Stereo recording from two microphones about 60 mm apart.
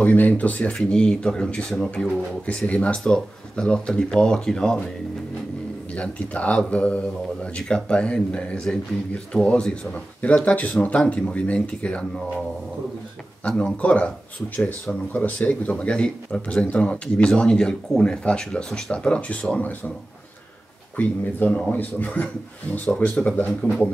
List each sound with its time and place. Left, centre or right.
0.0 s speech: left; by 4.7 s centre
5.9 s speech: left
15.1 s speech: left
20.9 s speech: left